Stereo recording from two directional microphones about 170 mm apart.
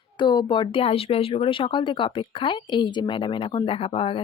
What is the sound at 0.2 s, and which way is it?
Speech, 25° left (ahead or behind).